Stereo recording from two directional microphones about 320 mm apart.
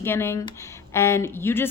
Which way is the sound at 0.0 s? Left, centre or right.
Centre.